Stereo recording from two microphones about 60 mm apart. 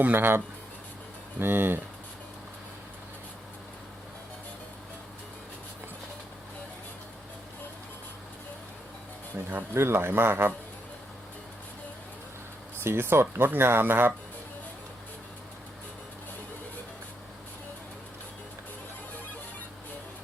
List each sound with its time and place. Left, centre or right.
0.0 s speech: right
9.5 s a man's voice: right
12.8 s speech: right